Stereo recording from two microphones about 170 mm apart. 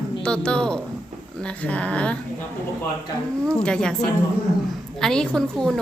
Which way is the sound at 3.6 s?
5° left (ahead or behind).